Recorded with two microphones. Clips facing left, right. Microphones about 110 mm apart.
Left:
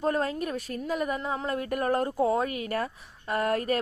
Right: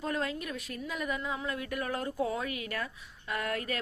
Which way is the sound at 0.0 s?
40° left (ahead or behind).